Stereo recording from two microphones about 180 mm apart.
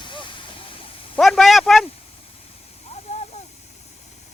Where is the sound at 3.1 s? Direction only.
35° left (ahead or behind).